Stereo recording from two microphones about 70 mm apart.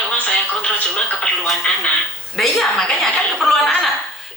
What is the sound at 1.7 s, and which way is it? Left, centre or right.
Speech, centre.